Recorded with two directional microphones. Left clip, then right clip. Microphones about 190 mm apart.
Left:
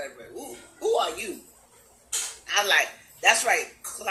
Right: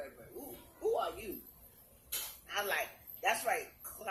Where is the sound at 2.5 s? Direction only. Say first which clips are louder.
Left 14 dB; 25° left (ahead or behind).